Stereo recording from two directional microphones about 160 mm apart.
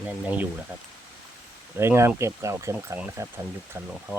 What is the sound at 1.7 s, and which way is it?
Speech, 15° right (ahead or behind).